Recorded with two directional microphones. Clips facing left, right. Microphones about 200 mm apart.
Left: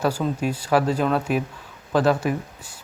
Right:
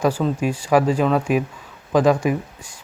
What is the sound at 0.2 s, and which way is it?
Speech, 5° left (ahead or behind).